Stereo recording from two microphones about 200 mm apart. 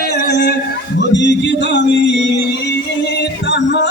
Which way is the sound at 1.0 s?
60° left (ahead or behind).